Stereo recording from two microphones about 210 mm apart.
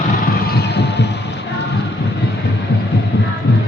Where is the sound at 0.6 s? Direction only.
55° left (ahead or behind).